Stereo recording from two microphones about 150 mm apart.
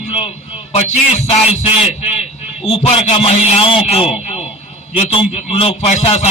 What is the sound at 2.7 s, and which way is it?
A man's voice, 40° left (ahead or behind).